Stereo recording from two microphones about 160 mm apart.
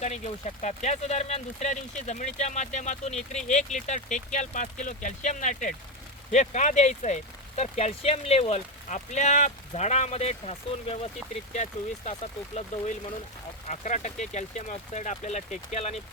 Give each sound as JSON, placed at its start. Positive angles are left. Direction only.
{"t": 0.0, "sound": "speech", "side_deg": 45}
{"t": 13.7, "sound": "speech", "side_deg": 50}